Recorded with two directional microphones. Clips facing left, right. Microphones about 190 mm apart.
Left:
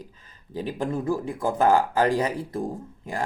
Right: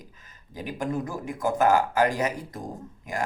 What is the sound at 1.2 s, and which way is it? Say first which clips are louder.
Speech: right 1 dB; 30° left (ahead or behind).